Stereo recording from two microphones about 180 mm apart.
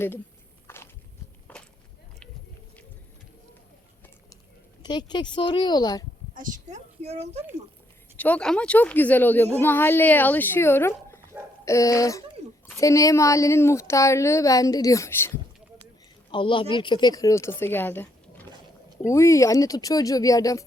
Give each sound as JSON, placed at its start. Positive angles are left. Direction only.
{"t": 0.7, "sound": "walk", "side_deg": 15}
{"t": 4.8, "sound": "a woman's voice", "side_deg": 25}
{"t": 6.3, "sound": "speech", "side_deg": -45}
{"t": 8.1, "sound": "a woman's voice", "side_deg": 10}
{"t": 16.3, "sound": "a woman's voice", "side_deg": 30}